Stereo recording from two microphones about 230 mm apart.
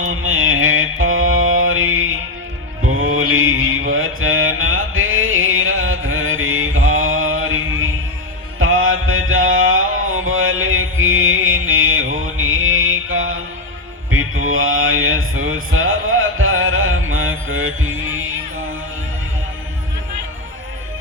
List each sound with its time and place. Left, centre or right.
0.0 s mantra: right